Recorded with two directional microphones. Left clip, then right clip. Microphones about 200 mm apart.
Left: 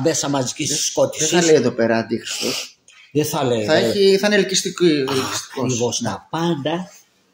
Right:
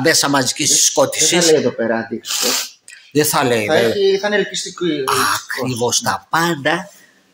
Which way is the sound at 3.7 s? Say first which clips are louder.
Left 2 dB; 50° left (ahead or behind).